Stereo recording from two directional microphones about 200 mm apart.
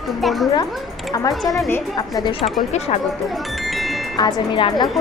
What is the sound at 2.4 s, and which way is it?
Speech, 30° left (ahead or behind).